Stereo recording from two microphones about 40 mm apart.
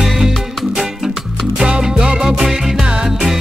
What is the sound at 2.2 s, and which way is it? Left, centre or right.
Music, centre.